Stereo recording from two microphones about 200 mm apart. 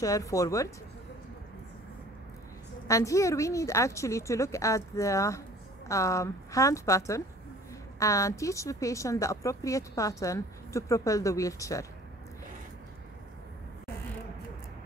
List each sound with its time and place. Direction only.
0.0 s a woman's voice: 15° left (ahead or behind)
2.9 s a woman's voice: 15° left (ahead or behind)